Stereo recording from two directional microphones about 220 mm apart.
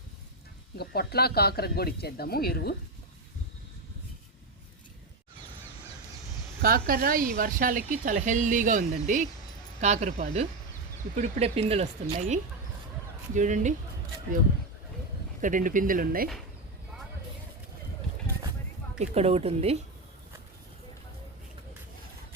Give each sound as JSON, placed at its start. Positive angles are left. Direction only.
{"t": 0.8, "sound": "speech", "side_deg": 45}
{"t": 6.6, "sound": "speech", "side_deg": -40}
{"t": 15.4, "sound": "speech", "side_deg": -35}
{"t": 18.9, "sound": "speech", "side_deg": -30}